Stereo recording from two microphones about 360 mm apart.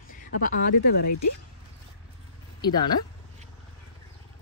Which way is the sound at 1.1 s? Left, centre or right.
Left.